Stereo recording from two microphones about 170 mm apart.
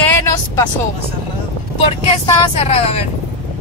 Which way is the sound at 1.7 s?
35° left (ahead or behind).